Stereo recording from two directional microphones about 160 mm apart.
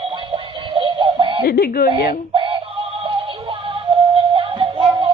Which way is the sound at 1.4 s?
70° left (ahead or behind).